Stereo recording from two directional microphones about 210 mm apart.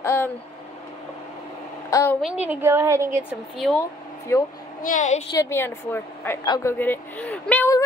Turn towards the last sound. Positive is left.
turn(degrees=10)  # may be behind; listen again after turning